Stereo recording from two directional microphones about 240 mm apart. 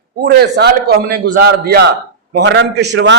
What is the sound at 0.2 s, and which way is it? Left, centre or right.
A man's voice, right.